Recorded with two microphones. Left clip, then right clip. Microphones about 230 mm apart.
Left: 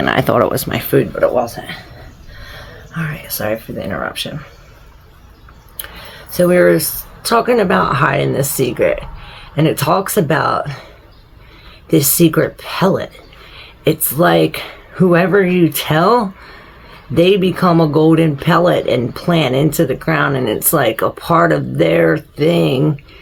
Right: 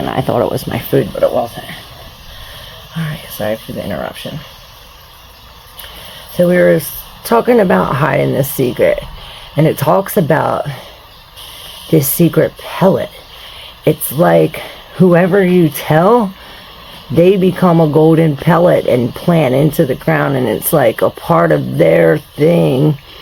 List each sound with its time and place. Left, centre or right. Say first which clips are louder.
0.0 s speech: left 2 dB; centre; by 1.3 s right
3.0 s speech: right 1 dB; right
6.3 s speech: right 1 dB; right
11.9 s speech: even; right
17.2 s speech: right 2 dB; right